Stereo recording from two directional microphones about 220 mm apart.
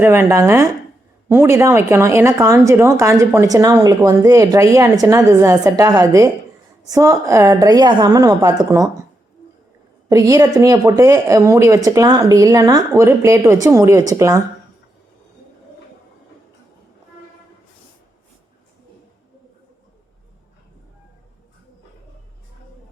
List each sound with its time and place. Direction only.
0.0 s speech: 10° right (ahead or behind)
10.1 s speech: 15° right (ahead or behind)